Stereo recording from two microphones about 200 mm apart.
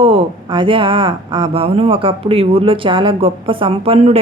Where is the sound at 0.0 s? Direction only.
30° right (ahead or behind).